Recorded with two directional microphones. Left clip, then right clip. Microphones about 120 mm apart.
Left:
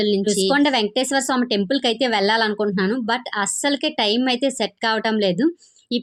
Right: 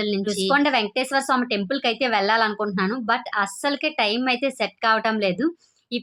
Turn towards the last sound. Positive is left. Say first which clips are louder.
# left 2 dB
turn(degrees=25)  # may be behind; listen again after turning